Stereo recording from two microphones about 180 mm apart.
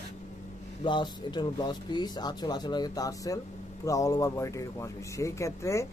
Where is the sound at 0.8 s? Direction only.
25° left (ahead or behind).